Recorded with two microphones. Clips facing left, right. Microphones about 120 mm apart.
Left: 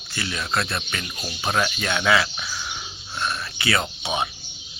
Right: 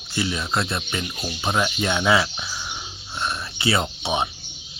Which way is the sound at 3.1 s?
25° right (ahead or behind).